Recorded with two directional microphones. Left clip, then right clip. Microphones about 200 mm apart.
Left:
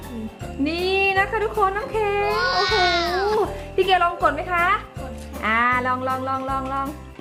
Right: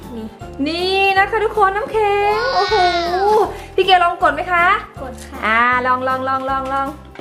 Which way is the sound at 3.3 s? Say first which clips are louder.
Right 6 dB; 15° right (ahead or behind).